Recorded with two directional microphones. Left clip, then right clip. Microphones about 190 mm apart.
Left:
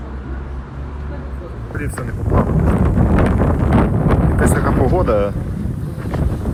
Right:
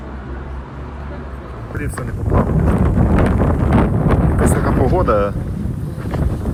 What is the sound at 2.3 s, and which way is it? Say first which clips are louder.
Wind noise: even; 10° right (ahead or behind).